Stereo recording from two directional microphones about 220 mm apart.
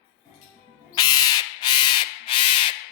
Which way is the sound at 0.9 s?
20° left (ahead or behind).